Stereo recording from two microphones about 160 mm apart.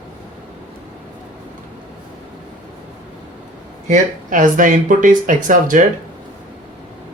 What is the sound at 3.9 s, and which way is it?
Speech, 55° right (ahead or behind).